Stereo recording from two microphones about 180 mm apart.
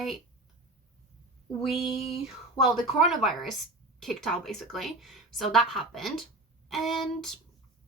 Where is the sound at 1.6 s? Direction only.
Centre (ahead or behind).